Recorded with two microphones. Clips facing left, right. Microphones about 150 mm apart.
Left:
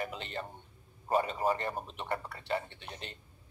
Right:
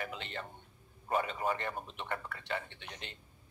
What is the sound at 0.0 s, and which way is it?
A man's voice, 35° left (ahead or behind).